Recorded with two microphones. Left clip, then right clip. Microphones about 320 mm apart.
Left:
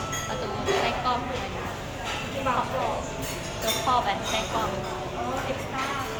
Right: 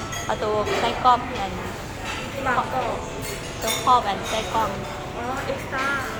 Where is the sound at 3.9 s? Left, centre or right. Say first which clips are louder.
Right 7 dB; centre.